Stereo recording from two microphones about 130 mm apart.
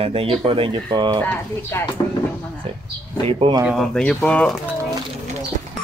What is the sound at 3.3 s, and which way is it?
Speech, 45° right (ahead or behind).